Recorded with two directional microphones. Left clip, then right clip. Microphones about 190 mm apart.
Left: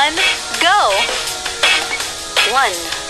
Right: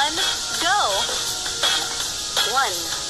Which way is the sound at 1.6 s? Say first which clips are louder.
Left 8 dB; 35° left (ahead or behind).